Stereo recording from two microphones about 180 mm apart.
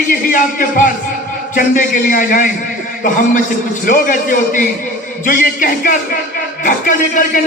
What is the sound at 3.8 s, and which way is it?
A man's voice, 45° left (ahead or behind).